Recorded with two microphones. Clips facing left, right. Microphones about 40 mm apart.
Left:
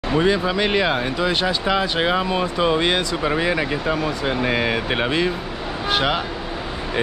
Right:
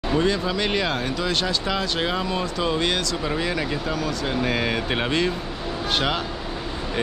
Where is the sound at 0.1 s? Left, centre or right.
Centre.